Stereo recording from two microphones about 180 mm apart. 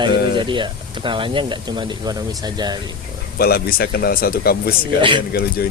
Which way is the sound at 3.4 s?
55° left (ahead or behind).